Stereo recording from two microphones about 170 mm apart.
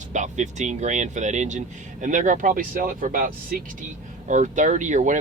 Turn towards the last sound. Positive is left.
turn(degrees=-50)  # may be behind; listen again after turning